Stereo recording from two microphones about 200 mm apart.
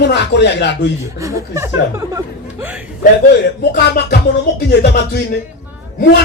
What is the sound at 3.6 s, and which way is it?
A man's voice, 55° left (ahead or behind).